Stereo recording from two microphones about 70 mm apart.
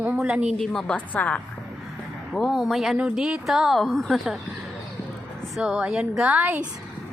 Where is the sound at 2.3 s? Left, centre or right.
Centre.